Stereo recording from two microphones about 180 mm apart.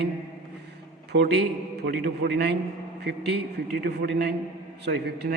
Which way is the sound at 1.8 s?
65° right (ahead or behind).